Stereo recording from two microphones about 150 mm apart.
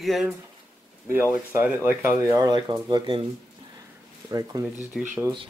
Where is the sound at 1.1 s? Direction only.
15° right (ahead or behind); by 3.3 s 30° right (ahead or behind).